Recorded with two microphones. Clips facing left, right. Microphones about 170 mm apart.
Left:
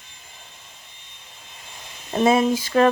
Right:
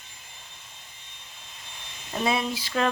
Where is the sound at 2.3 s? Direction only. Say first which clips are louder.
Left 9 dB; 45° left (ahead or behind).